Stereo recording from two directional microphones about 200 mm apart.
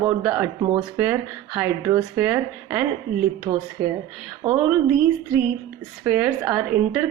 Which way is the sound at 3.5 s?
25° right (ahead or behind).